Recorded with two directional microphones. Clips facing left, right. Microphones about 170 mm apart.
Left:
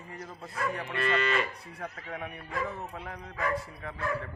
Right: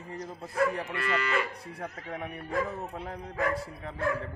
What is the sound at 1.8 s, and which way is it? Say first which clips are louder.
A man's voice: right 1 dB; 30° right (ahead or behind).